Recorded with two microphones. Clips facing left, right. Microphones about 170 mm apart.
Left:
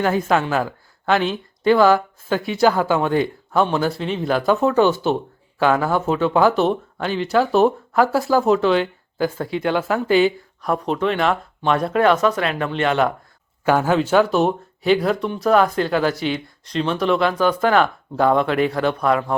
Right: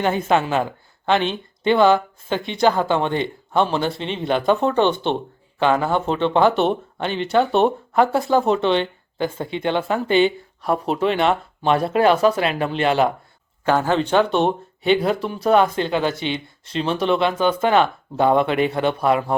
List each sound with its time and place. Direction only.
0.0 s speech: centre (ahead or behind)
11.2 s speech: 30° right (ahead or behind)
13.7 s speech: 10° left (ahead or behind)
15.8 s speech: 25° right (ahead or behind)
16.1 s speech: centre (ahead or behind)
17.2 s speech: 25° right (ahead or behind)
18.3 s speech: centre (ahead or behind)